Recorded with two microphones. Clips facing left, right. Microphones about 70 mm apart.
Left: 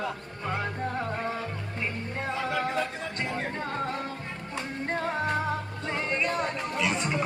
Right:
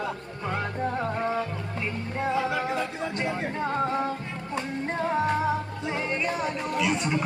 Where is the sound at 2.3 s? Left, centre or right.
Centre.